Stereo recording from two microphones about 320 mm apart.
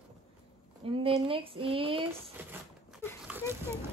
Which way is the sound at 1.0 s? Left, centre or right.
Centre.